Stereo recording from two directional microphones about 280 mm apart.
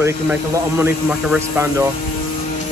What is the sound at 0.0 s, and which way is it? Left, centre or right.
Speech, centre.